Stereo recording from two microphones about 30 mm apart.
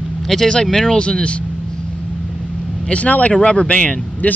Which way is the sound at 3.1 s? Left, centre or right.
Left.